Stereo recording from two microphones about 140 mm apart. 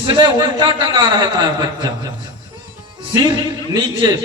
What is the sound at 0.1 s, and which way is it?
A man's voice, 35° right (ahead or behind).